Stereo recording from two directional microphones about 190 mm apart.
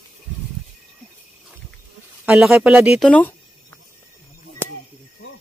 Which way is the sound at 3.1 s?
10° left (ahead or behind).